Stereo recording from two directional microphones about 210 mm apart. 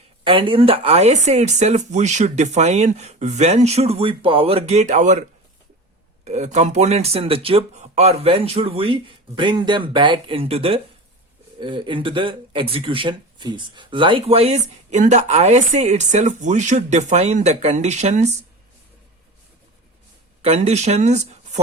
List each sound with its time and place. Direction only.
0.3 s speech: 25° right (ahead or behind)
6.2 s speech: 30° right (ahead or behind)
20.4 s speech: 30° right (ahead or behind)